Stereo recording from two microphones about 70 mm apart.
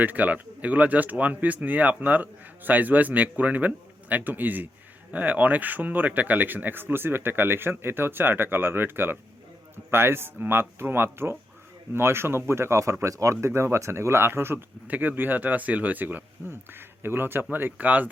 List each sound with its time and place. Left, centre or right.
0.0 s speech: right
14.8 s speech: right